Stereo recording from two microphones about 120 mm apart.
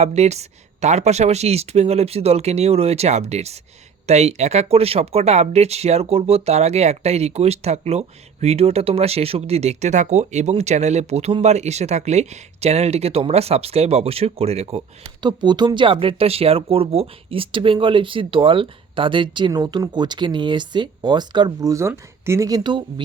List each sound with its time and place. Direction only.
0.0 s speech: 65° right (ahead or behind)
15.2 s speech: 40° right (ahead or behind)